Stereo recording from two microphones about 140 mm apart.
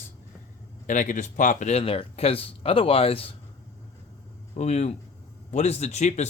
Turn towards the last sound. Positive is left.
turn(degrees=55)  # may be behind; listen again after turning